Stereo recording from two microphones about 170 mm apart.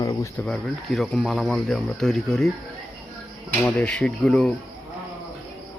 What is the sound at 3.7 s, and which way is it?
Speech, 5° left (ahead or behind).